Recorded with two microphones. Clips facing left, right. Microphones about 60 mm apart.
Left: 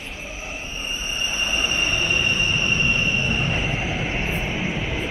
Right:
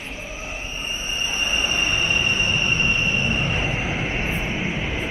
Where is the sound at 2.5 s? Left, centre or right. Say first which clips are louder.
Even; centre.